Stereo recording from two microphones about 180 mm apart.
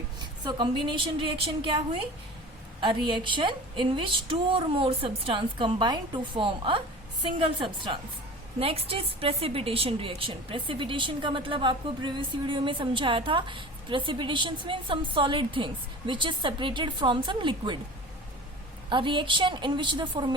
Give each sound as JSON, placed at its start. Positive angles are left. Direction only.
{"t": 0.4, "sound": "a woman's voice", "side_deg": -25}
{"t": 18.9, "sound": "a woman's voice", "side_deg": -25}